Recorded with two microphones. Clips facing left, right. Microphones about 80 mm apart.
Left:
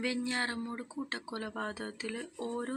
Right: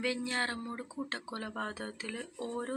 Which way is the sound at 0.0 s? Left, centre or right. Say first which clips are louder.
Even; left.